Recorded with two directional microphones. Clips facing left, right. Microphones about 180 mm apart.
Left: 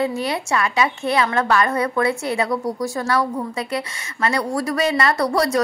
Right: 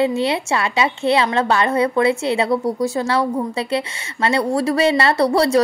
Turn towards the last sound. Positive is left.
turn(degrees=-30)  # may be behind; listen again after turning